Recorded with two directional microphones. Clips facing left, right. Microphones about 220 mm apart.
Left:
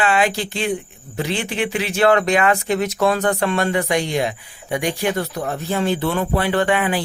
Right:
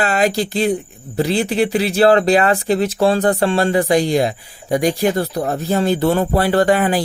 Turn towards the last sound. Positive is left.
turn(degrees=-40)  # may be behind; listen again after turning